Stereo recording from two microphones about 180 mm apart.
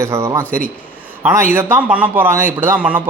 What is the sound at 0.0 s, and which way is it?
A man's voice, 15° right (ahead or behind).